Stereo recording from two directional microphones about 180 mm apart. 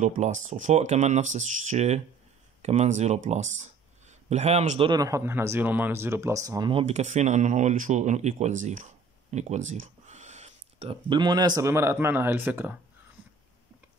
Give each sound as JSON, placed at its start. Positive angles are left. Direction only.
{"t": 0.0, "sound": "speech", "side_deg": -40}
{"t": 6.7, "sound": "speech", "side_deg": -35}